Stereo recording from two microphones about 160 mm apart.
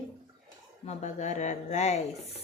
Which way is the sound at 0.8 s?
50° left (ahead or behind).